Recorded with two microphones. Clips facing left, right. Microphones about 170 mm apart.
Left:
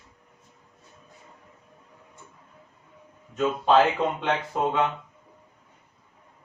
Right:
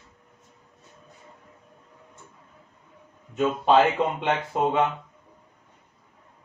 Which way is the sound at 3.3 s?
20° right (ahead or behind).